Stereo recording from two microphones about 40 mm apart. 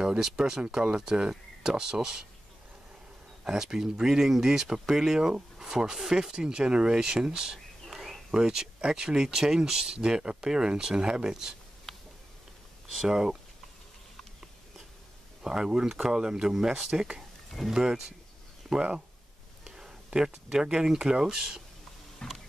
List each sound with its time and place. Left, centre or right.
0.0 s speech: centre
3.4 s speech: centre
7.5 s a sound: centre
8.3 s speech: centre
13.1 s speech: centre
15.4 s speech: centre
16.5 s speech: centre
19.6 s a sound: centre
20.5 s speech: centre
22.2 s vehicle: centre